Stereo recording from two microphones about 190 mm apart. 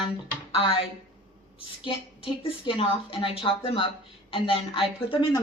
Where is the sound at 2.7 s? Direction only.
25° left (ahead or behind).